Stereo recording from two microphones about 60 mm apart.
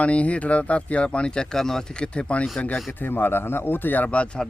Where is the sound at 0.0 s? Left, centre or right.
Left.